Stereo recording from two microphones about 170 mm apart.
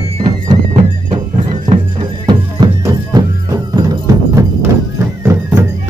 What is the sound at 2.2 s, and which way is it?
Music, 25° right (ahead or behind).